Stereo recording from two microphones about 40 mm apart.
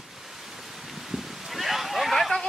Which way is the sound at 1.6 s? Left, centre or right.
Centre.